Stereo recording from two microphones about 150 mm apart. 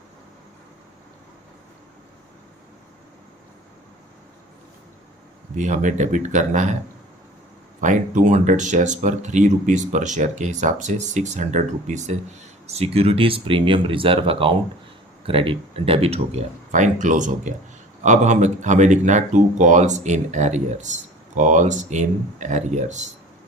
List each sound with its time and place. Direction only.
5.5 s speech: 55° right (ahead or behind)
7.8 s speech: 55° right (ahead or behind)